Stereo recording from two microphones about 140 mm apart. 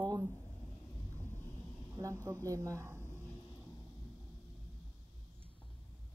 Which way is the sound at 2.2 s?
25° right (ahead or behind).